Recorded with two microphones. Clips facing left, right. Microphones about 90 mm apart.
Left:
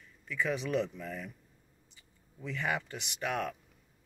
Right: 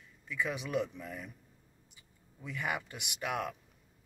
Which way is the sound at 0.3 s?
15° right (ahead or behind).